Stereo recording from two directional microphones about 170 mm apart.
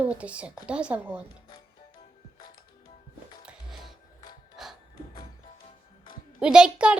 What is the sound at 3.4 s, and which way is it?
Music, centre (ahead or behind).